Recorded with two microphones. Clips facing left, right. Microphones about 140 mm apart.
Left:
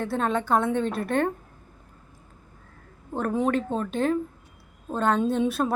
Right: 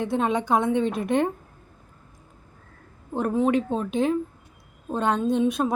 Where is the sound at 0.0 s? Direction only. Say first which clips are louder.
Right 2 dB; 15° right (ahead or behind).